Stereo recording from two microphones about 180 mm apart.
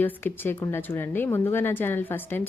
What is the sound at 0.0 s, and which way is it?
Speech, 10° left (ahead or behind).